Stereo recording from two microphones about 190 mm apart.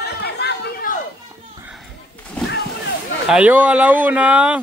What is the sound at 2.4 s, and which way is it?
Boat, 60° left (ahead or behind).